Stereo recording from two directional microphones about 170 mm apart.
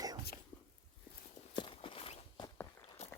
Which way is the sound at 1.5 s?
30° left (ahead or behind).